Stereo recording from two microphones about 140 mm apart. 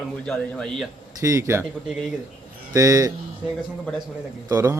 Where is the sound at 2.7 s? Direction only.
25° right (ahead or behind).